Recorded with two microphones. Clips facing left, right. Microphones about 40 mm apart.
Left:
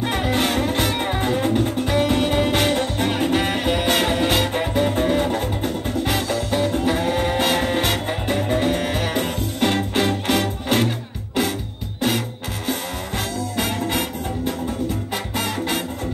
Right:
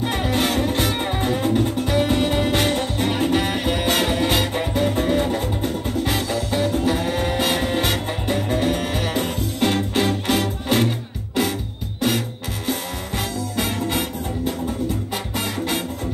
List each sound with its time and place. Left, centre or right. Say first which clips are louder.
0.0 s music: left 1 dB; centre
13.6 s music: even; centre
15.3 s music: left 1 dB; centre